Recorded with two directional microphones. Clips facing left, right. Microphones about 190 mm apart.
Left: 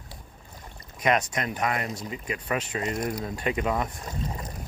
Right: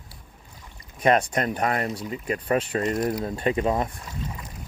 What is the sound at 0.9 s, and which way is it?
Speech, 30° right (ahead or behind).